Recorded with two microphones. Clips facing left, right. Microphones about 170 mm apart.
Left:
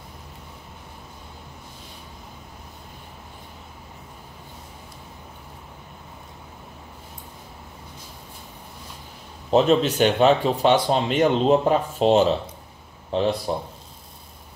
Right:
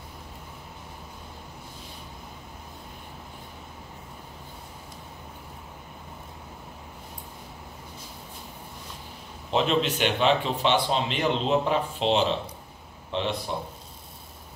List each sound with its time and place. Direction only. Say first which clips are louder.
9.5 s speech: left 6 dB; 40° left (ahead or behind)